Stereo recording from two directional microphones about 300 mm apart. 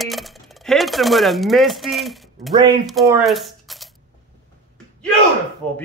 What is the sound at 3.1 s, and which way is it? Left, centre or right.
Typewriter, centre.